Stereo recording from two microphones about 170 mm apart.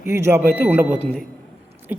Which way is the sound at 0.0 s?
15° right (ahead or behind).